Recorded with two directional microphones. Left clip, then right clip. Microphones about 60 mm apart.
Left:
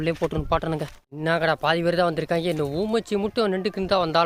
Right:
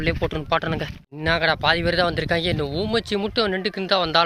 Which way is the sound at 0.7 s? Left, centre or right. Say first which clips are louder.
Right 1 dB; left.